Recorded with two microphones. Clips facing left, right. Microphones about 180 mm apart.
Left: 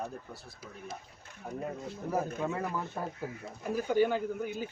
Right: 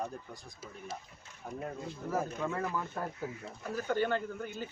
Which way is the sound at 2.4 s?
20° left (ahead or behind).